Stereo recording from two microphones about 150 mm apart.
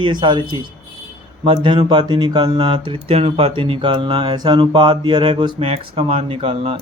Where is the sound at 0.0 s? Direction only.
30° right (ahead or behind).